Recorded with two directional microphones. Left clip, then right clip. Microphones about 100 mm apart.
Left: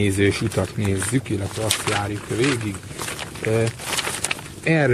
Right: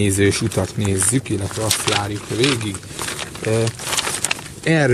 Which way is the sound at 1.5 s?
25° right (ahead or behind).